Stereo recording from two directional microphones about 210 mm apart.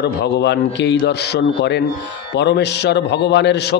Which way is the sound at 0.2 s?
55° left (ahead or behind).